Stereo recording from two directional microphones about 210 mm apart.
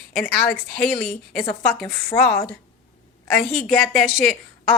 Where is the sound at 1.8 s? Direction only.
15° left (ahead or behind).